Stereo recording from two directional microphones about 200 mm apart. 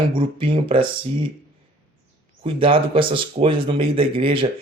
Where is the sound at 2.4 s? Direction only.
25° right (ahead or behind).